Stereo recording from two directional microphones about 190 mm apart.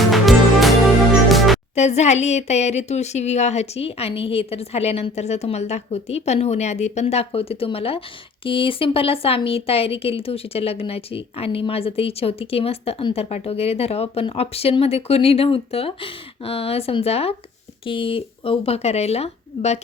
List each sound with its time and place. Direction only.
0.0 s music: centre (ahead or behind)
1.7 s speech: 35° left (ahead or behind)